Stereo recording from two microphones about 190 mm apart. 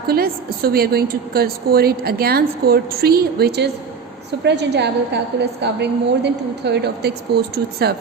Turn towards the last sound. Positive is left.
turn(degrees=-60)  # may be behind; listen again after turning